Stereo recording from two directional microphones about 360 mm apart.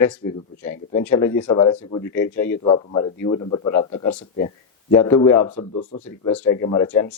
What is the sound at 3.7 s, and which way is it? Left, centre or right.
Speech, left.